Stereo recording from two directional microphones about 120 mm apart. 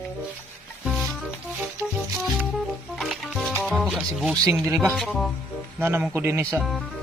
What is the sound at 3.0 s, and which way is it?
Music, centre (ahead or behind).